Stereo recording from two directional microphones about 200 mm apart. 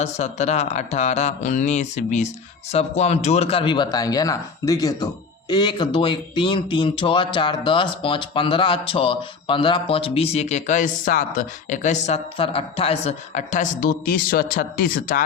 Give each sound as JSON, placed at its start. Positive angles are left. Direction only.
{"t": 0.0, "sound": "a woman's voice", "side_deg": 35}